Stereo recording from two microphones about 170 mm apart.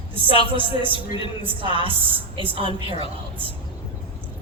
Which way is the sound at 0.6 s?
30° right (ahead or behind).